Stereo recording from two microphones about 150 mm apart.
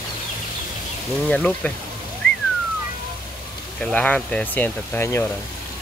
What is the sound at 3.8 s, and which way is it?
Speech, 10° left (ahead or behind).